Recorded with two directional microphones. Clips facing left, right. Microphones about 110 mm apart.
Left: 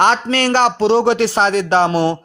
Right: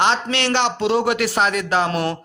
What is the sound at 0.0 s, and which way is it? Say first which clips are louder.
Speech: left 5 dB; 45° left (ahead or behind).